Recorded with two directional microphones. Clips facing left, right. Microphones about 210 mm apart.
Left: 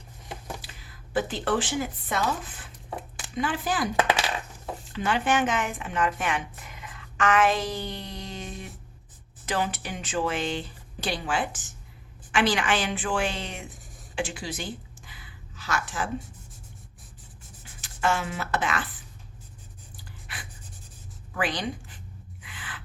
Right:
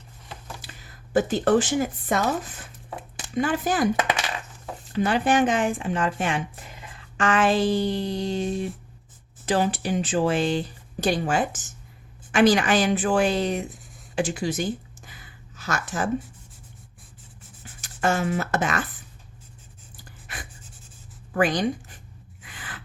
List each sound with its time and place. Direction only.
0.8 s speech: 45° right (ahead or behind)
4.9 s speech: 40° right (ahead or behind)
14.2 s a sound: 40° right (ahead or behind)
17.7 s speech: 45° right (ahead or behind)
20.2 s writing: 45° right (ahead or behind)
21.3 s speech: 45° right (ahead or behind)
22.4 s filing: 40° right (ahead or behind)